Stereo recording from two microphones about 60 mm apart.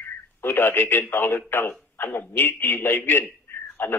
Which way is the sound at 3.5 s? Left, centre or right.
Left.